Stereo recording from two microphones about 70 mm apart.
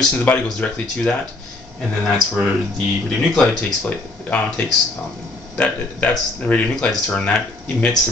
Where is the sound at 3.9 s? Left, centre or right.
Left.